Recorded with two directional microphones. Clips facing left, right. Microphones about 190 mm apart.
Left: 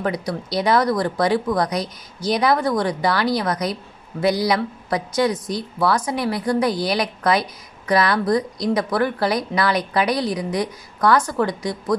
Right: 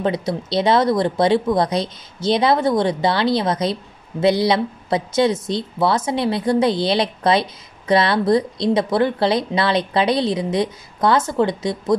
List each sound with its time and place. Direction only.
0.0 s speech: 25° right (ahead or behind)